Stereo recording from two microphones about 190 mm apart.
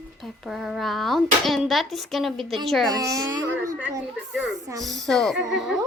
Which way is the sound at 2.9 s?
20° right (ahead or behind).